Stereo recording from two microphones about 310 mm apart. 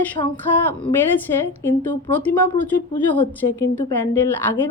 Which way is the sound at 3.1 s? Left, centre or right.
Centre.